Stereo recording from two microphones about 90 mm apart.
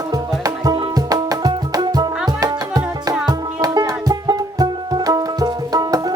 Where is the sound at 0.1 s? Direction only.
45° right (ahead or behind).